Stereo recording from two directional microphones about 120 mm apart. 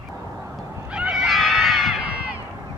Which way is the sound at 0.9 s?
5° right (ahead or behind).